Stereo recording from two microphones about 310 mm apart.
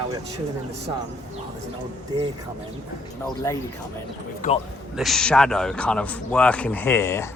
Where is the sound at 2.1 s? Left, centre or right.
Centre.